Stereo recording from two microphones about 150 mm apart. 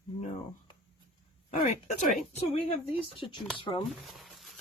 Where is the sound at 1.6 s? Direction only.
55° left (ahead or behind).